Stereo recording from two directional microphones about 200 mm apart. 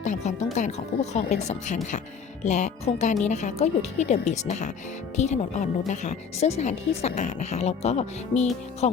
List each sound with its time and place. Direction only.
0.0 s speech: 35° left (ahead or behind)